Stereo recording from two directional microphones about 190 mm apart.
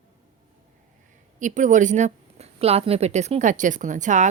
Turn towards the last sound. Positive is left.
turn(degrees=-40)  # may be behind; listen again after turning